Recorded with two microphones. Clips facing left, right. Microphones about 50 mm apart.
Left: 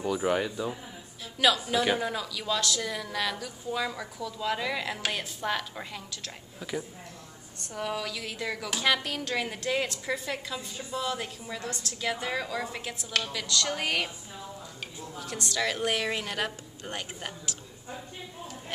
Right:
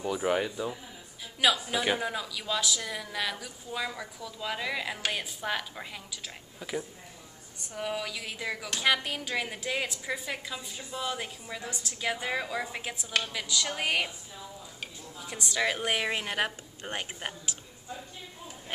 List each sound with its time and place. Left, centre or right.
0.0 s a woman's voice: centre; by 17.6 s right